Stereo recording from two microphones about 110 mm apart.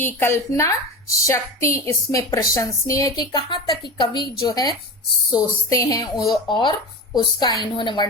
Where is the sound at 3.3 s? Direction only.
45° left (ahead or behind).